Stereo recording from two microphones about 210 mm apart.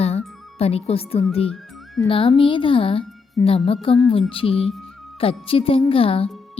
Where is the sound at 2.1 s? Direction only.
25° left (ahead or behind).